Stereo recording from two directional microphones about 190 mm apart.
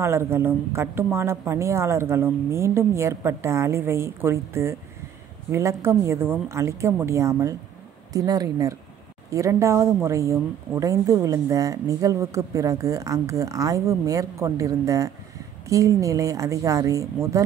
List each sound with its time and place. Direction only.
0.0 s speech: 15° right (ahead or behind)